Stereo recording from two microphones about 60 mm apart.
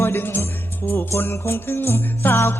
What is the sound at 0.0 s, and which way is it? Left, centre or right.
Music, left.